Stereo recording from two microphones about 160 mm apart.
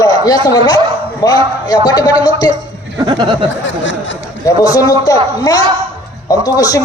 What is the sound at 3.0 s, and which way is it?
Speech, 30° right (ahead or behind).